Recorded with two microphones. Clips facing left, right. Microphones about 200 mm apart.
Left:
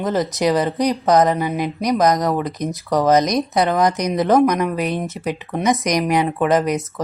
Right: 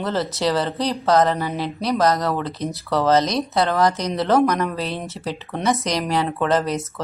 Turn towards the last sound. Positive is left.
turn(degrees=15)  # may be behind; listen again after turning